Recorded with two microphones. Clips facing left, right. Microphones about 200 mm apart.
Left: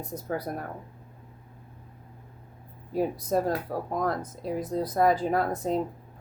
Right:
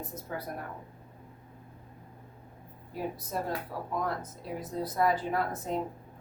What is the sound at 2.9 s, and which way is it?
A woman's voice, 40° left (ahead or behind).